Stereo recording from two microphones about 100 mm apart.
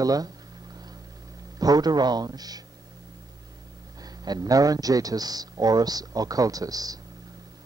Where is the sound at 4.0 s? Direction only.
40° right (ahead or behind).